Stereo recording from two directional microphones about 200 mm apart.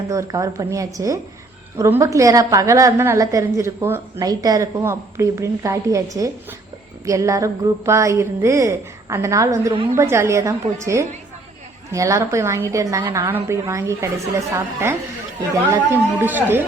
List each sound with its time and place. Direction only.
0.1 s a woman's voice: 15° right (ahead or behind)